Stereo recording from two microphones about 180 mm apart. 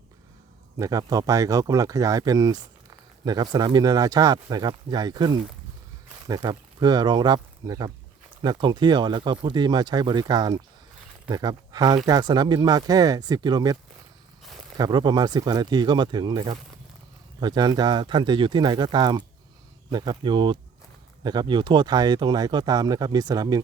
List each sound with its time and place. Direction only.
0.8 s speech: 20° right (ahead or behind)
14.8 s speech: 25° right (ahead or behind)